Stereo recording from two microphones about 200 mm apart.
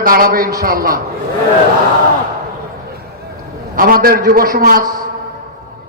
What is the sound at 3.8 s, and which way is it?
A man's voice, 45° right (ahead or behind).